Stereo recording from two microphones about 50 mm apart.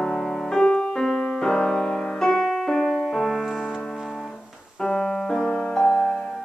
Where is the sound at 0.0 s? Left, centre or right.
Centre.